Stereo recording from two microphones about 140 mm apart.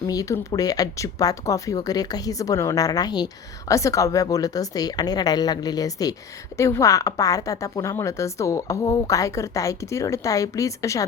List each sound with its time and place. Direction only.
0.1 s a woman's voice: 25° left (ahead or behind)